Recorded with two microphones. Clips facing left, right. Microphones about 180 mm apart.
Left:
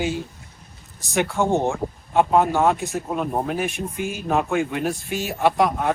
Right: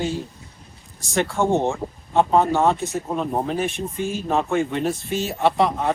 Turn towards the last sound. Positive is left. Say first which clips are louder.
# even
turn(degrees=5)  # may be behind; listen again after turning